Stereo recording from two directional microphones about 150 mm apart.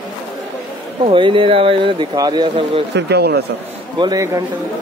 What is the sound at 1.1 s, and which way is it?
Speech, 35° right (ahead or behind).